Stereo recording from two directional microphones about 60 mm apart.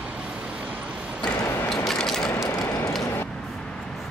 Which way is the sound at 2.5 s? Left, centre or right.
Left.